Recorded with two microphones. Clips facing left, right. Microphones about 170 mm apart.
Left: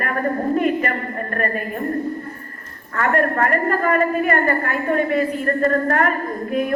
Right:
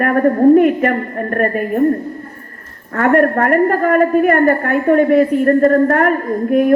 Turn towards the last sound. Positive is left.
turn(degrees=-55)  # may be behind; listen again after turning